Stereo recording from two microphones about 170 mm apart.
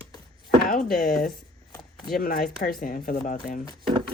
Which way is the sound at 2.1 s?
60° left (ahead or behind).